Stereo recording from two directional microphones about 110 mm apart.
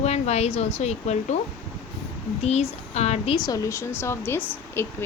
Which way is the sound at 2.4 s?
80° left.